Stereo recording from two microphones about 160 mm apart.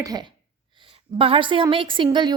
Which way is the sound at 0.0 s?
25° right (ahead or behind).